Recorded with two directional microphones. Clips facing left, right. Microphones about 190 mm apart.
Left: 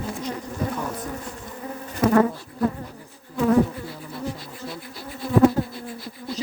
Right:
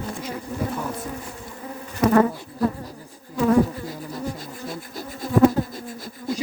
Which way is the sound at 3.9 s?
40° right (ahead or behind).